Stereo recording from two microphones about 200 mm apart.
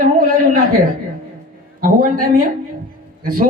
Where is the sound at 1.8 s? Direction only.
45° right (ahead or behind).